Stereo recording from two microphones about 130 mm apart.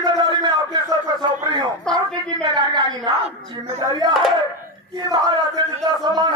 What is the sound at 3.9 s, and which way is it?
Crowd, 30° right (ahead or behind).